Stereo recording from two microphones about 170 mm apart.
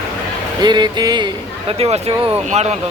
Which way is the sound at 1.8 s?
35° right (ahead or behind).